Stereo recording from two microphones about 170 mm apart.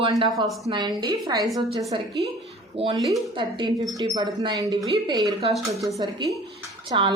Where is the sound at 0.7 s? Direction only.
25° right (ahead or behind).